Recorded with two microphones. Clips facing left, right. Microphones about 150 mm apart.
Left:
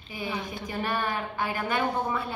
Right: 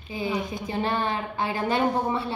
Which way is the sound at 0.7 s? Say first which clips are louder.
Right 3 dB; 25° right (ahead or behind).